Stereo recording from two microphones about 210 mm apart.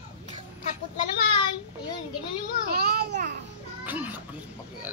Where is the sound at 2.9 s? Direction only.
50° right (ahead or behind).